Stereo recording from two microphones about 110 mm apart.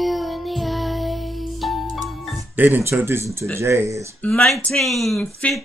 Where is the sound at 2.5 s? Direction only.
15° right (ahead or behind).